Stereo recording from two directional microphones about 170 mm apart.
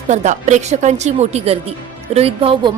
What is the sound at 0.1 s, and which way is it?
A woman's voice, 45° right (ahead or behind).